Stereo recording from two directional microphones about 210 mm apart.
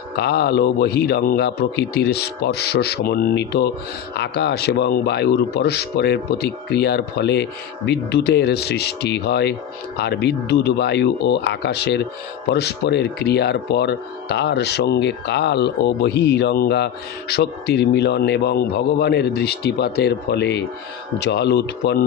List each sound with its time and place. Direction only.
0.2 s speech: 50° left (ahead or behind)